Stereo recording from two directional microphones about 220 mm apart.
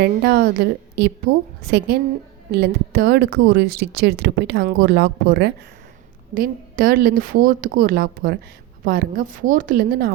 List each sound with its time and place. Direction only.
0.0 s a woman's voice: 45° right (ahead or behind)